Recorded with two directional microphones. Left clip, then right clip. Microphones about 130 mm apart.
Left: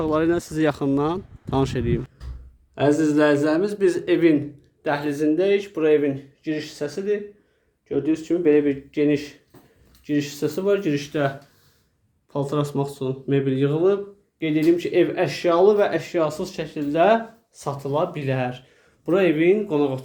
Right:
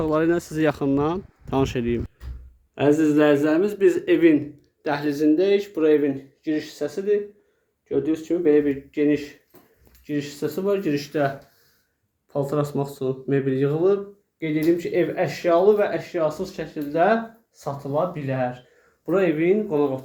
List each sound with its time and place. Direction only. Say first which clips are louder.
0.0 s a man's voice: even; centre (ahead or behind)
12.3 s a man's voice: right 1 dB; centre (ahead or behind)
14.4 s speech: left 2 dB; 20° left (ahead or behind); by 20.0 s 40° left (ahead or behind)